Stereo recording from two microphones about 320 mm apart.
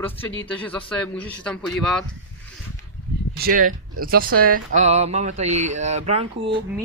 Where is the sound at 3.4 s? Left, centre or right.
Right.